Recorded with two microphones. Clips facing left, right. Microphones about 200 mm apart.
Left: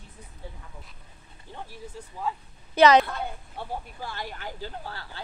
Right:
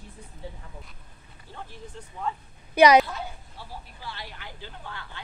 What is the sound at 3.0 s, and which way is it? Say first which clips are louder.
Speech: left 3 dB; 55° left (ahead or behind).